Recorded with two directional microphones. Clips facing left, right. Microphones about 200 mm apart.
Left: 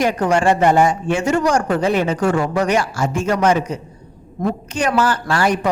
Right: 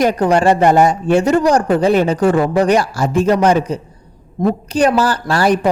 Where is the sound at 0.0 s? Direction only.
35° right (ahead or behind).